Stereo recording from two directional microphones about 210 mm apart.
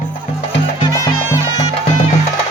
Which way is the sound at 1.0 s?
15° left (ahead or behind).